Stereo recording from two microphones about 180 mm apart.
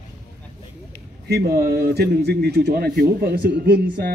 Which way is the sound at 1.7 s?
60° right (ahead or behind).